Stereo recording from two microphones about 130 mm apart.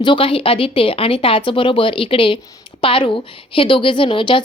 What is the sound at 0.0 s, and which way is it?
A woman's voice, 40° left (ahead or behind).